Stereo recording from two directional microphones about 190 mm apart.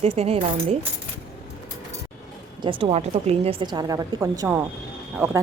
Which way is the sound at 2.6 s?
25° right (ahead or behind).